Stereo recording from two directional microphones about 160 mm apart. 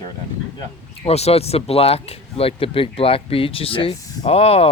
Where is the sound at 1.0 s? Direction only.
40° left (ahead or behind).